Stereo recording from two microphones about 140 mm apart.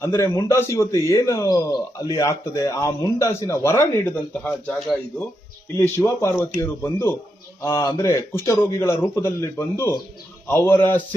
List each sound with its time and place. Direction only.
0.0 s a man's voice: 20° left (ahead or behind)
5.7 s a man's voice: 20° left (ahead or behind)